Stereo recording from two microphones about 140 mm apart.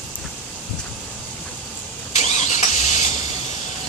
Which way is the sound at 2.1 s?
55° left (ahead or behind).